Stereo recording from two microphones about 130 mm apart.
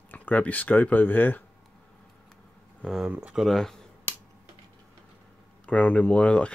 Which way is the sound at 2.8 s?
5° right (ahead or behind).